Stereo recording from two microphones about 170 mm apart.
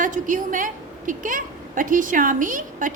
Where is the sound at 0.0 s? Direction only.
50° right (ahead or behind).